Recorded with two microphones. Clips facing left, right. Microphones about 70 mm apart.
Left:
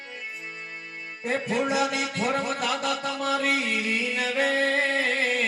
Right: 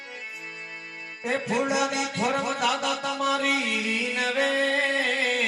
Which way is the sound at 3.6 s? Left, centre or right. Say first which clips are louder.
Left 1 dB; left.